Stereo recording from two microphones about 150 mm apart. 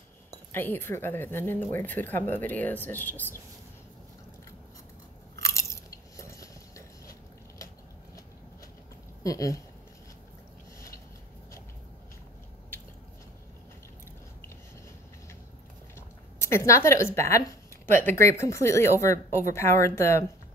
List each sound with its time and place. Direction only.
0.5 s speech: 15° left (ahead or behind)
5.4 s biting: 20° left (ahead or behind)
9.2 s speech: 20° left (ahead or behind)
16.3 s speech: 15° left (ahead or behind)